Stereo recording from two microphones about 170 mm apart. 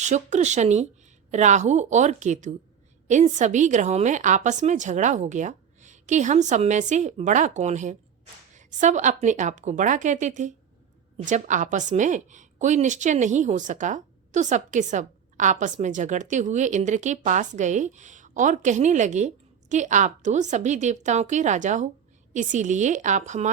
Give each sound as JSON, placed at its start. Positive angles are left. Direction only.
{"t": 0.0, "sound": "a woman's voice", "side_deg": -45}